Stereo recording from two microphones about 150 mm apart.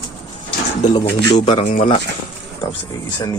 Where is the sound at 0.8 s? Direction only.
50° left (ahead or behind).